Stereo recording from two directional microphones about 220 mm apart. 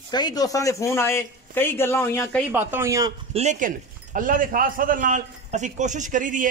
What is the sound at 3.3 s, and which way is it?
A man's voice, 30° right (ahead or behind).